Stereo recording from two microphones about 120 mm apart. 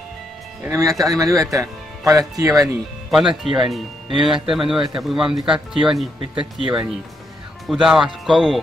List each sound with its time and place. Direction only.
0.7 s speech: 25° right (ahead or behind)
2.6 s speech: centre (ahead or behind)
6.3 s speech: 45° right (ahead or behind)
7.6 s speech: 5° right (ahead or behind)